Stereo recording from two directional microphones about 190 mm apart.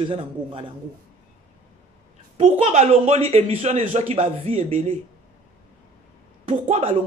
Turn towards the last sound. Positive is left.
turn(degrees=-30)  # may be behind; listen again after turning